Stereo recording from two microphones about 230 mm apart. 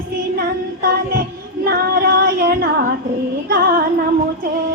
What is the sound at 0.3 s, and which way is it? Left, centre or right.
Music, right.